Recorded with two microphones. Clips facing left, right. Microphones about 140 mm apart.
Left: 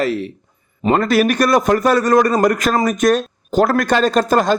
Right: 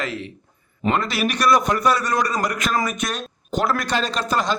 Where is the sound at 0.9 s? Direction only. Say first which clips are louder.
Left 7 dB; 50° left (ahead or behind).